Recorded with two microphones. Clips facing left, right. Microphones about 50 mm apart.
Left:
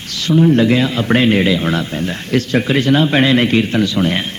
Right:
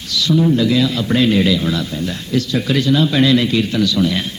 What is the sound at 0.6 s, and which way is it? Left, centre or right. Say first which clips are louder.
Speech: left 2 dB; left.